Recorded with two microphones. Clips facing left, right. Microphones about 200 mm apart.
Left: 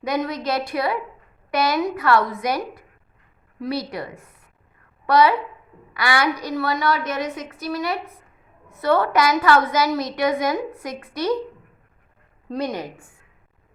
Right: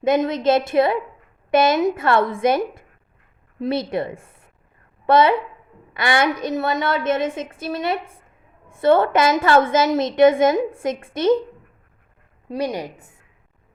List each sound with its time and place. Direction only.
0.0 s a woman's voice: 25° right (ahead or behind)
12.5 s a woman's voice: 15° right (ahead or behind)